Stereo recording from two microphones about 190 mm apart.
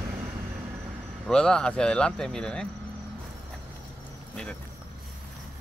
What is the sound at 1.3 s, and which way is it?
Speech, 5° left (ahead or behind).